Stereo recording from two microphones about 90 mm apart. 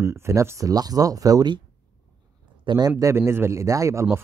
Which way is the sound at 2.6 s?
45° right (ahead or behind).